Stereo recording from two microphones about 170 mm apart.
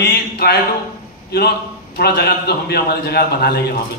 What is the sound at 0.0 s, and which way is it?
Speech, 70° left (ahead or behind).